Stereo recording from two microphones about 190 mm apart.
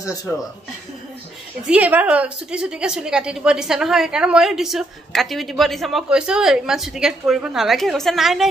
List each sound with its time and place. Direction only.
0.0 s speech: 20° left (ahead or behind)
1.7 s a woman's voice: 10° right (ahead or behind)